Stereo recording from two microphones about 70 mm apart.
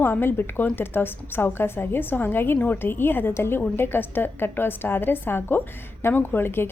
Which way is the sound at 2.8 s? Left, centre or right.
Left.